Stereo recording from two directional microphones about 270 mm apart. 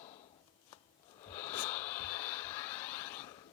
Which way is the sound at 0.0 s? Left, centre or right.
Left.